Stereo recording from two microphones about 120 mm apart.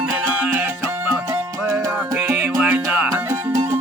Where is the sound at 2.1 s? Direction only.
20° right (ahead or behind).